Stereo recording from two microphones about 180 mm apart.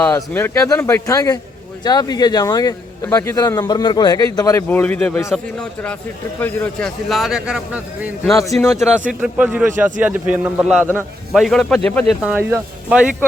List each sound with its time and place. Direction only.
0.0 s a man's voice: 10° left (ahead or behind)
4.7 s a man's voice: 10° left (ahead or behind)
12.2 s a man's voice: 10° right (ahead or behind)